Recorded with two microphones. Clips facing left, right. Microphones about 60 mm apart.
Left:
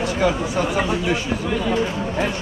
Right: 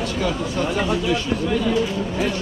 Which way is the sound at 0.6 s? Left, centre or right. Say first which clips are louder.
Even; centre.